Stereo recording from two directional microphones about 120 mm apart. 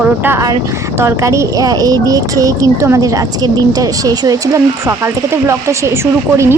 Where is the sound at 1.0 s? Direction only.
25° right (ahead or behind).